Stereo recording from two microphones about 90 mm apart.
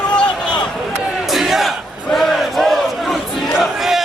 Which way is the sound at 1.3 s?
5° right (ahead or behind).